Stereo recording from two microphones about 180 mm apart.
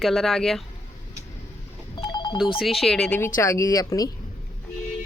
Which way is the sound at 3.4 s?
15° left (ahead or behind).